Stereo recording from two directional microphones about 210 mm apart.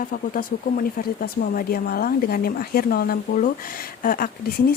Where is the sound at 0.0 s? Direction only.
40° left (ahead or behind).